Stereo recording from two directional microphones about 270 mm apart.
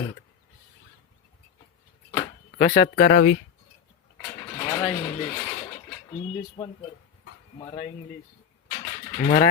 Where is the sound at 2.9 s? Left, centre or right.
Left.